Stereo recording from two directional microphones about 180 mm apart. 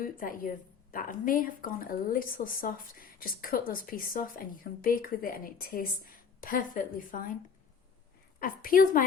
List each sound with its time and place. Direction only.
0.0 s a woman's voice: 50° left (ahead or behind)
8.4 s a woman's voice: 50° left (ahead or behind)